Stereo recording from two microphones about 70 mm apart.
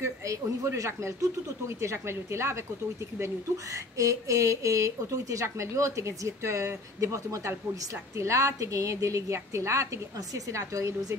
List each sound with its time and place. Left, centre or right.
0.0 s a woman's voice: right
3.7 s speech: right